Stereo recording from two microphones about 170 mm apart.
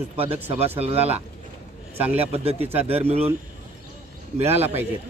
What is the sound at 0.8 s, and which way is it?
A man's voice, 35° right (ahead or behind).